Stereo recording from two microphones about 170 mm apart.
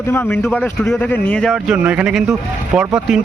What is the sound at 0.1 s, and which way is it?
Speech, 15° left (ahead or behind).